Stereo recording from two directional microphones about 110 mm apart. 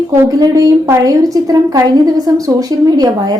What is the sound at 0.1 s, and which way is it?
A woman's voice, 30° right (ahead or behind).